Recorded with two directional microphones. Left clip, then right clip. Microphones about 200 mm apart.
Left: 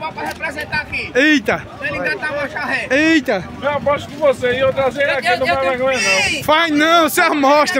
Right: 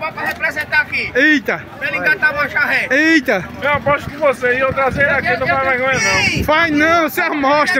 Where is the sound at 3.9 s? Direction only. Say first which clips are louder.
Even; 10° left (ahead or behind).